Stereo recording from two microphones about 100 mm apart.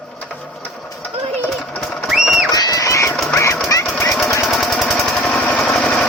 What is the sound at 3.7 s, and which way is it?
Jackhammer, 35° left (ahead or behind).